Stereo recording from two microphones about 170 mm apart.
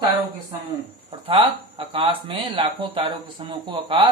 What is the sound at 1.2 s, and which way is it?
Speech, 30° right (ahead or behind).